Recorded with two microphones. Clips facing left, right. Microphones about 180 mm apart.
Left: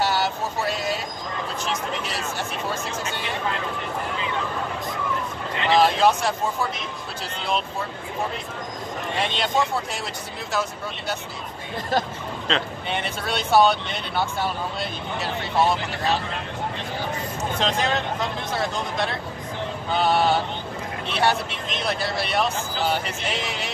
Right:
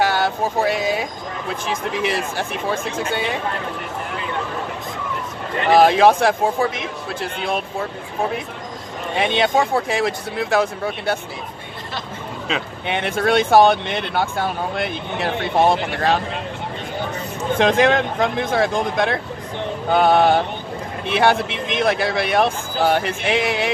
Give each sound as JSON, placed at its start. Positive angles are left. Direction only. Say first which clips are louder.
{"t": 0.0, "sound": "speech", "louder": "right 5 dB", "side_deg": -55}
{"t": 2.0, "sound": "speech", "louder": "right 6 dB", "side_deg": -55}
{"t": 5.6, "sound": "speech", "louder": "right 6 dB", "side_deg": -55}
{"t": 9.2, "sound": "speech", "louder": "right 7 dB", "side_deg": -55}
{"t": 12.8, "sound": "speech", "louder": "right 8 dB", "side_deg": -60}
{"t": 17.6, "sound": "speech", "louder": "right 9 dB", "side_deg": -55}